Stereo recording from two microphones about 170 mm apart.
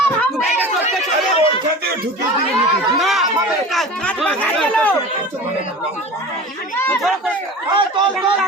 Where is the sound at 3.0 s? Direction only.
Centre (ahead or behind).